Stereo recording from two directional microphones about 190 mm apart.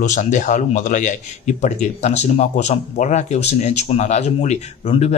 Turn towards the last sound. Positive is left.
turn(degrees=35)  # may be behind; listen again after turning